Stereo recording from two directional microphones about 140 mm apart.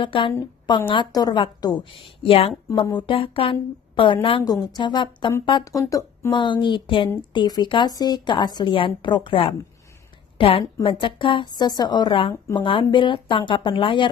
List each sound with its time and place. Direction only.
0.0 s a woman's voice: 40° left (ahead or behind)